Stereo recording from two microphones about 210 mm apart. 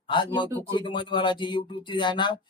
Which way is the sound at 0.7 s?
20° left (ahead or behind).